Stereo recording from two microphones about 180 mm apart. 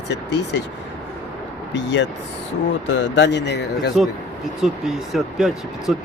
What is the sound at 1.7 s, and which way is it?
Speech, 80° left.